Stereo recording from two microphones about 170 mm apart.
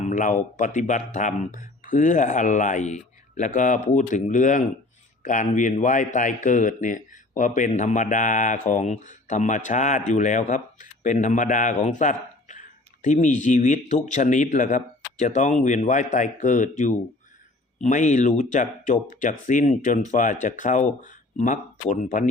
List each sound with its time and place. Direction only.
0.0 s speech: 50° left (ahead or behind)